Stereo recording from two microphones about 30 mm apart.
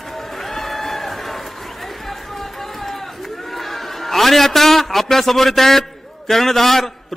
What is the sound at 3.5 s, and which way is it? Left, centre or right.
A man's voice, centre.